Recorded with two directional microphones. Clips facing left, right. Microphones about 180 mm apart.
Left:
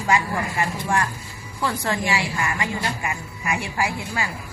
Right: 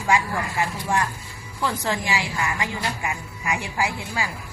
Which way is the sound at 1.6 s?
15° right (ahead or behind).